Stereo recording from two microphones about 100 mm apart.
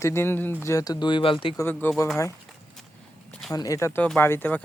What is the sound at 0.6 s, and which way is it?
Speech, 35° left (ahead or behind).